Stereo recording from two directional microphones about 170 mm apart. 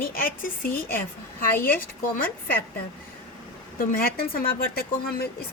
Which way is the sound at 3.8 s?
60° left (ahead or behind).